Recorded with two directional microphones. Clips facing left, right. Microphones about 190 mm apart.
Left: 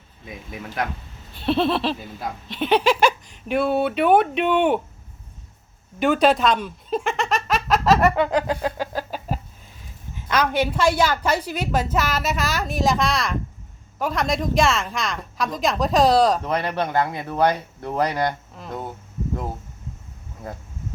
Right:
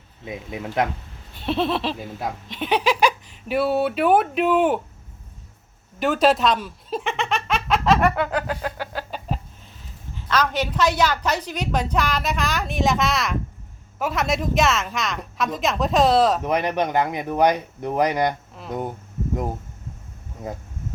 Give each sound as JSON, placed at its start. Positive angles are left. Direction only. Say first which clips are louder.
{"t": 0.3, "sound": "speech", "louder": "right 4 dB", "side_deg": -20}
{"t": 1.5, "sound": "speech", "louder": "left 2 dB", "side_deg": 0}
{"t": 6.0, "sound": "giggle", "louder": "left 1 dB", "side_deg": 0}
{"t": 8.2, "sound": "a sound", "louder": "left 3 dB", "side_deg": 15}
{"t": 10.2, "sound": "a woman's voice", "louder": "left 2 dB", "side_deg": 10}
{"t": 16.4, "sound": "speech", "louder": "right 2 dB", "side_deg": -15}